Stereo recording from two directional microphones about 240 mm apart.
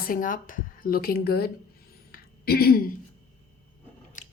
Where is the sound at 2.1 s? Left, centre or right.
Left.